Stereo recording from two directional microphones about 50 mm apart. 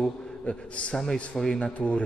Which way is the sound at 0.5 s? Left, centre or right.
Left.